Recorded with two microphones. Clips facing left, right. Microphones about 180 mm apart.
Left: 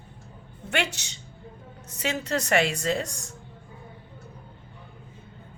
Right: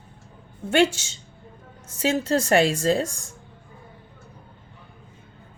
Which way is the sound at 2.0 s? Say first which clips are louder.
Right 6 dB; 30° right (ahead or behind).